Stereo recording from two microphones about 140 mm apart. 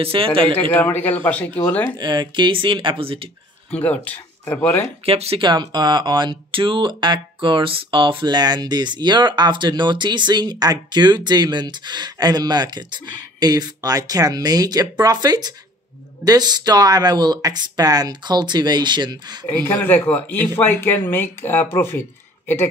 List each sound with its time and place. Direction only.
0.0 s speech: 40° right (ahead or behind)
0.6 s speech: 10° left (ahead or behind)
2.0 s speech: 30° right (ahead or behind)
3.7 s speech: 10° left (ahead or behind)
5.0 s speech: 45° right (ahead or behind)
5.5 s speech: 30° right (ahead or behind)
19.4 s speech: 15° left (ahead or behind)